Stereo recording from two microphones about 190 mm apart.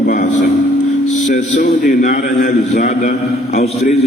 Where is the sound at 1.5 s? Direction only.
45° left (ahead or behind).